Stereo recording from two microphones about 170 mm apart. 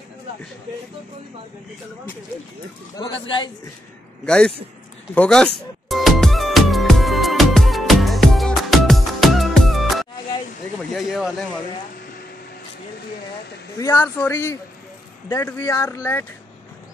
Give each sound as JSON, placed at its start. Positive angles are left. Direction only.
{"t": 3.0, "sound": "a man's voice", "side_deg": 30}
{"t": 4.3, "sound": "speech", "side_deg": 5}
{"t": 5.1, "sound": "music", "side_deg": 5}
{"t": 11.0, "sound": "speech", "side_deg": 0}
{"t": 13.7, "sound": "speech", "side_deg": 15}